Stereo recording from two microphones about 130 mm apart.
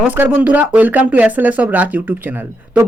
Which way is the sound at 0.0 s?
15° right (ahead or behind).